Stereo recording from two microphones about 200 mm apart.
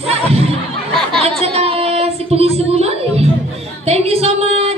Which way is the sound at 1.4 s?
30° right (ahead or behind).